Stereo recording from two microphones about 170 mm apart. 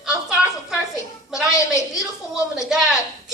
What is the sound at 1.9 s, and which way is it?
A woman's voice, 5° right (ahead or behind).